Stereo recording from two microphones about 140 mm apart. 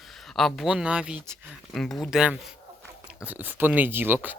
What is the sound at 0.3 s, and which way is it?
Speech, centre (ahead or behind).